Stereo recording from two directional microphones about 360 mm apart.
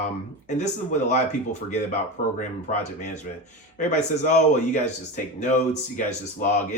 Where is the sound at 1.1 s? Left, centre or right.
Centre.